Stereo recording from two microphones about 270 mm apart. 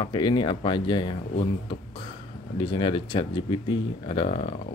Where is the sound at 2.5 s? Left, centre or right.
Centre.